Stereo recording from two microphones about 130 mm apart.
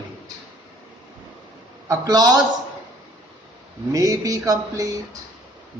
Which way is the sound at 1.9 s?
30° right (ahead or behind).